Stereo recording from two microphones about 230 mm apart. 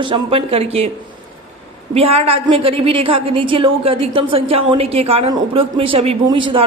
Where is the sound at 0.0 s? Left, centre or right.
Right.